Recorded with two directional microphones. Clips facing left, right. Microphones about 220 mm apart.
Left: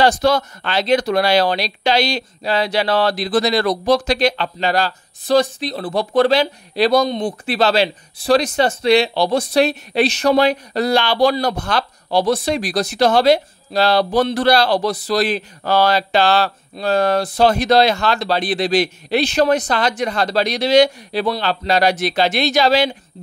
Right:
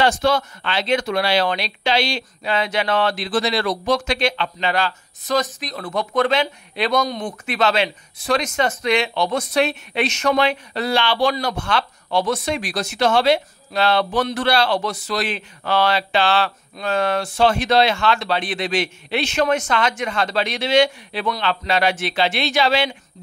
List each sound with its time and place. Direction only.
0.0 s speech: 40° left (ahead or behind)